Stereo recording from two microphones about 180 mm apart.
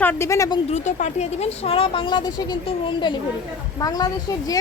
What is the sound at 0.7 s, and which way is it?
A woman's voice, 40° left (ahead or behind).